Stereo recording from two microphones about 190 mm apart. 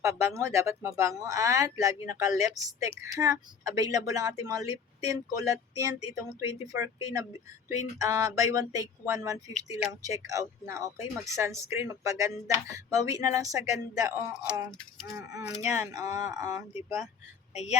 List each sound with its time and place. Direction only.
0.0 s speech: 15° right (ahead or behind)
14.8 s speech: centre (ahead or behind)
15.4 s speech: 15° right (ahead or behind)
17.5 s a woman's voice: 35° left (ahead or behind)